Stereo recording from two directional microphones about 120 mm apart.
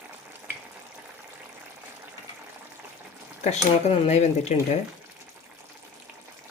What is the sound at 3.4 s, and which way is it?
Cutlery, 65° left (ahead or behind).